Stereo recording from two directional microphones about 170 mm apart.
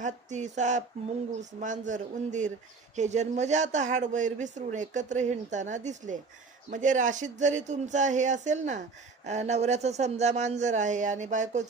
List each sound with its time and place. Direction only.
0.0 s speech: 45° right (ahead or behind)